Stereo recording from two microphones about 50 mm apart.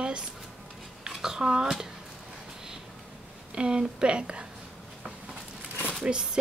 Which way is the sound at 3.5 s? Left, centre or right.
Centre.